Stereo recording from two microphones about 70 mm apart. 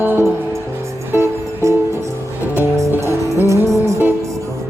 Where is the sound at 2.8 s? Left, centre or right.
Right.